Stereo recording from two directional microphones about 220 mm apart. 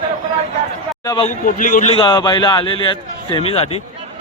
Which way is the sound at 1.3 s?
35° left (ahead or behind).